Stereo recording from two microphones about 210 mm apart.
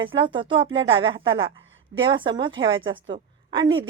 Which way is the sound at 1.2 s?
65° right (ahead or behind).